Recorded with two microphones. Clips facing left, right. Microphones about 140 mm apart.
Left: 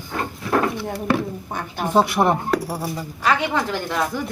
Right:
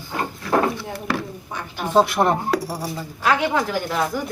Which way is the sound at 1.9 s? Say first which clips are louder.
Even; 10° left (ahead or behind).